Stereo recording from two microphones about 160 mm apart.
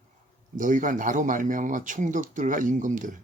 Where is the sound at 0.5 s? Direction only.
55° right (ahead or behind).